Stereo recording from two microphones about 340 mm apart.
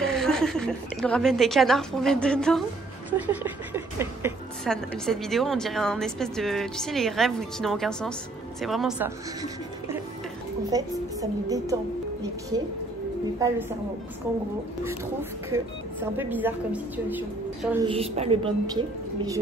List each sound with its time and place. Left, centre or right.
0.0 s a woman's voice: centre
13.4 s a woman's voice: centre
15.5 s a woman's voice: centre
17.8 s a woman's voice: centre